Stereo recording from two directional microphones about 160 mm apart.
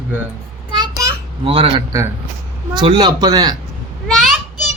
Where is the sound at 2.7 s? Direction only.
30° right (ahead or behind).